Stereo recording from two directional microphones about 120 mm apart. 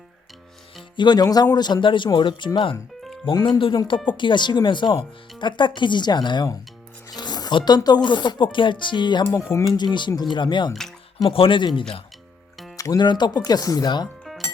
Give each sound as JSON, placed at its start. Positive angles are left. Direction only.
{"t": 0.9, "sound": "a man's voice", "side_deg": 35}
{"t": 7.1, "sound": "music", "side_deg": 35}
{"t": 7.8, "sound": "a man's voice", "side_deg": 35}
{"t": 12.7, "sound": "a man's voice", "side_deg": 30}